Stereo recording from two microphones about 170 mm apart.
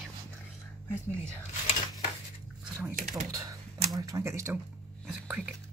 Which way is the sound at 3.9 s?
20° right (ahead or behind).